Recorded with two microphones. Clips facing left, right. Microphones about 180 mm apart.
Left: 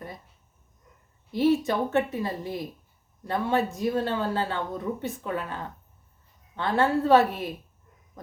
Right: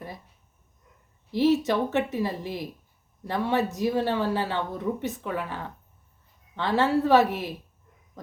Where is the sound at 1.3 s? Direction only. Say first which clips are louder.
Right 1 dB; 20° right (ahead or behind).